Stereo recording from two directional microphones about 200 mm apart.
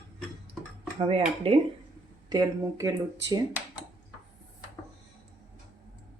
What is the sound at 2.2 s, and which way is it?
Speech, 20° right (ahead or behind).